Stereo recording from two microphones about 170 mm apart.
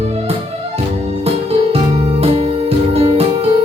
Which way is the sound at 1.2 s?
35° right (ahead or behind).